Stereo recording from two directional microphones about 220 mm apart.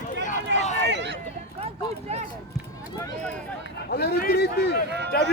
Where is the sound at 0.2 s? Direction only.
35° left (ahead or behind).